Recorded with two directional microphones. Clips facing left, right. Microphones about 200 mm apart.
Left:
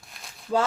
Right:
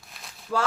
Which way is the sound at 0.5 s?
25° left (ahead or behind).